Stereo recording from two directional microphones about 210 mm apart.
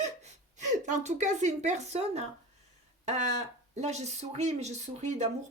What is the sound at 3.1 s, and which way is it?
Speech, 35° right (ahead or behind).